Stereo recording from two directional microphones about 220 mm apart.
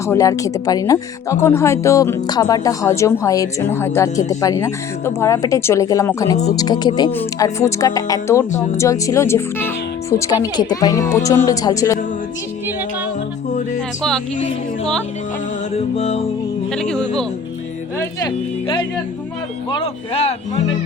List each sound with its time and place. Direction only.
0.1 s speech: 15° left (ahead or behind)
16.0 s speech: 30° left (ahead or behind)
16.7 s speech: 5° left (ahead or behind)
19.7 s speech: 25° left (ahead or behind)